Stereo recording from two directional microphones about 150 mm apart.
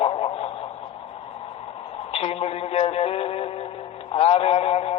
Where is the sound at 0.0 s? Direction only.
40° left (ahead or behind).